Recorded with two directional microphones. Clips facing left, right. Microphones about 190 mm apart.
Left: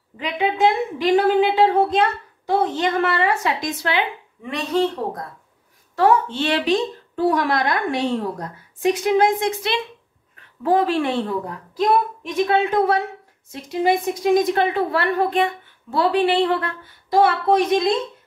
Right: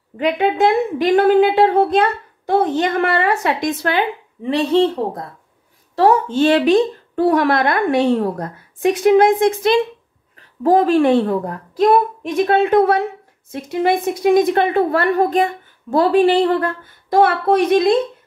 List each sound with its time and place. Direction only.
0.2 s a woman's voice: 55° right (ahead or behind)
4.4 s speech: 30° right (ahead or behind)
5.9 s a woman's voice: 40° right (ahead or behind); by 12.9 s 60° right (ahead or behind)
14.3 s a woman's voice: 55° right (ahead or behind)